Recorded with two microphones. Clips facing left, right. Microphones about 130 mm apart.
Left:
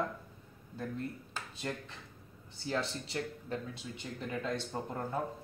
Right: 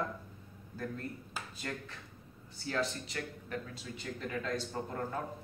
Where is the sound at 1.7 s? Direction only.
20° left (ahead or behind).